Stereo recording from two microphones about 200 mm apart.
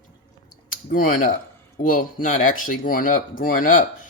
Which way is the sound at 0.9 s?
40° left (ahead or behind).